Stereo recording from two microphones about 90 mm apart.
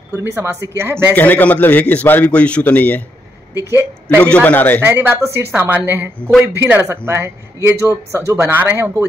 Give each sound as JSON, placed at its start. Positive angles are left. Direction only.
{"t": 0.1, "sound": "a man's voice", "side_deg": -25}
{"t": 1.1, "sound": "a man's voice", "side_deg": 20}
{"t": 4.2, "sound": "a man's voice", "side_deg": 15}
{"t": 4.8, "sound": "a man's voice", "side_deg": -25}